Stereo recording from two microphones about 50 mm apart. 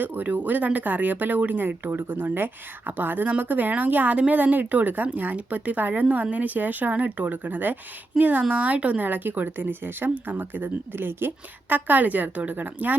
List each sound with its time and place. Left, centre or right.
0.0 s speech: right
11.7 s speech: right